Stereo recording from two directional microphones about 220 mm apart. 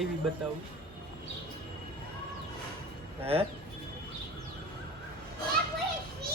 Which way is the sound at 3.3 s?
25° right (ahead or behind).